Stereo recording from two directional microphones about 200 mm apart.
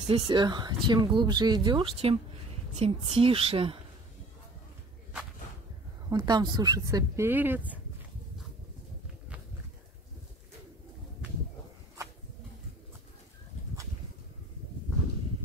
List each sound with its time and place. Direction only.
0.0 s speech: 30° right (ahead or behind)
6.0 s speech: 20° right (ahead or behind)